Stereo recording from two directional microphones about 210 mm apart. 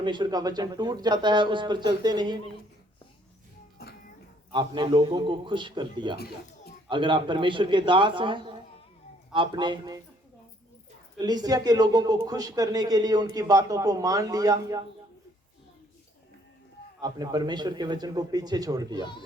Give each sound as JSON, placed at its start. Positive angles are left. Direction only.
{"t": 0.0, "sound": "speech", "side_deg": -20}
{"t": 3.8, "sound": "music", "side_deg": 50}
{"t": 4.5, "sound": "speech", "side_deg": -20}
{"t": 11.2, "sound": "speech", "side_deg": -20}
{"t": 17.0, "sound": "speech", "side_deg": -20}